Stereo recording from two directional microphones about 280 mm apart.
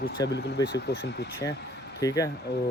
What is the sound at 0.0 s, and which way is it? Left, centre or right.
Speech, left.